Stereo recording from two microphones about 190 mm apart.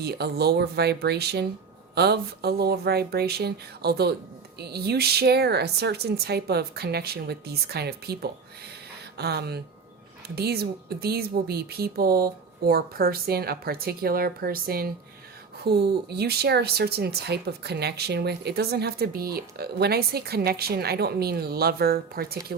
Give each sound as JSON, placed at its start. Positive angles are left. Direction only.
{"t": 0.0, "sound": "speech", "side_deg": -60}